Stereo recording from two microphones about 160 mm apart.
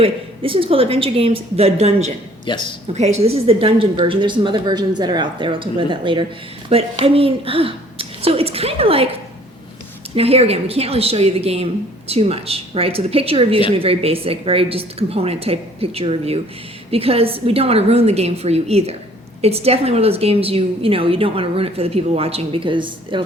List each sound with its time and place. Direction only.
0.0 s a woman's voice: 35° right (ahead or behind)
2.5 s speech: 30° left (ahead or behind)
2.9 s a woman's voice: 45° right (ahead or behind)
10.2 s a woman's voice: 40° right (ahead or behind)